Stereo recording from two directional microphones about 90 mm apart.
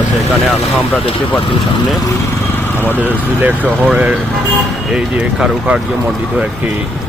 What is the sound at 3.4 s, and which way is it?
Speech, 20° right (ahead or behind).